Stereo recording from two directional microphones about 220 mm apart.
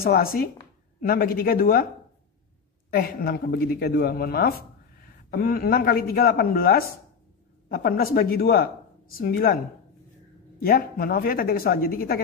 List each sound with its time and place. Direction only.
0.0 s speech: 40° left (ahead or behind)
2.9 s speech: 45° left (ahead or behind)
10.6 s speech: 45° left (ahead or behind)